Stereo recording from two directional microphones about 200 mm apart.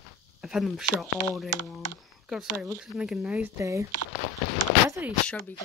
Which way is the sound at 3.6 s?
15° right (ahead or behind).